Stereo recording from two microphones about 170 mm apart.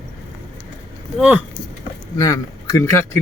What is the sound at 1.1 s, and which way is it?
Speech, 5° right (ahead or behind).